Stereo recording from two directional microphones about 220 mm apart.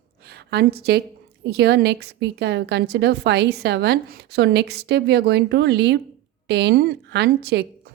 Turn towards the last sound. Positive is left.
turn(degrees=-50)  # may be behind; listen again after turning